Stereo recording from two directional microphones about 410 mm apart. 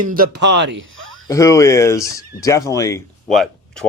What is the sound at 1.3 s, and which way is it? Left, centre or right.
Speech, centre.